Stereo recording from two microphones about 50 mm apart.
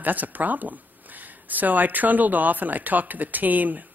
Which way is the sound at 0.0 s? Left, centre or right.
Right.